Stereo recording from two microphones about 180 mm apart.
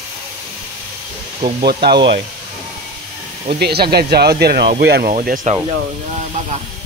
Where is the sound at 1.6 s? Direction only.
60° right (ahead or behind).